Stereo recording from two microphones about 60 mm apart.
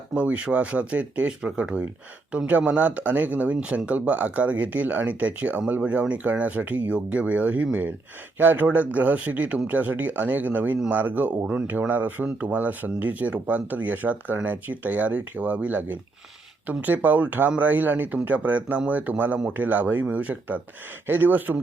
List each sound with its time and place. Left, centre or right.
0.1 s speech: centre